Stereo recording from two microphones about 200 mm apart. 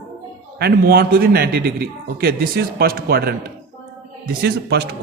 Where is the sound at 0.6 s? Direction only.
50° right (ahead or behind).